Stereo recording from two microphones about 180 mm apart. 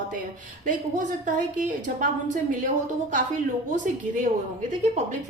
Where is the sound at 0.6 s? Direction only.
45° right (ahead or behind).